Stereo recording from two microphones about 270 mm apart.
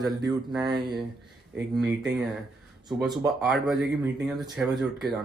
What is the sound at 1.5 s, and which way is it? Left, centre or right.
Speech, centre.